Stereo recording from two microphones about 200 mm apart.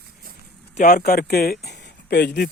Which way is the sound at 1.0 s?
50° left (ahead or behind).